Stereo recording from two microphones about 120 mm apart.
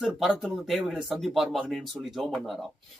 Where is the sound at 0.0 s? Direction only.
5° right (ahead or behind).